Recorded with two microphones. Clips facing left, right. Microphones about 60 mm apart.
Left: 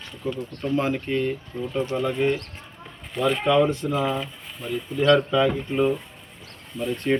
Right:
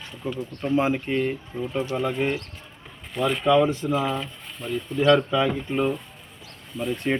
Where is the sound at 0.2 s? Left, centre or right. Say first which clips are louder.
Left 2 dB; centre.